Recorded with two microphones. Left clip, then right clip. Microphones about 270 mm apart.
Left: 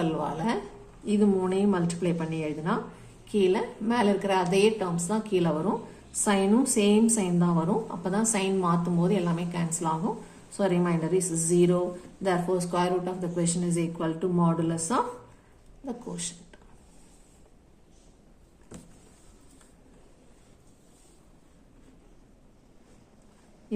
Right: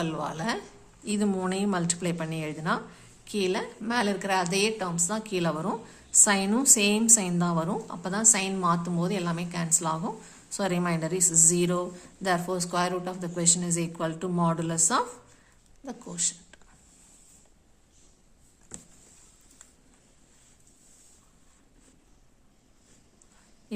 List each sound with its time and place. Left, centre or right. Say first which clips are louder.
0.0 s a woman's voice: left 2 dB; right